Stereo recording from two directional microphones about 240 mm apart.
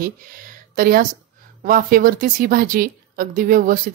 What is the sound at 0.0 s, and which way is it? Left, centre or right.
Speech, right.